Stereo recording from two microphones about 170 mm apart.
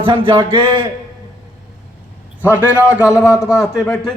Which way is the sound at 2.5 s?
10° right (ahead or behind).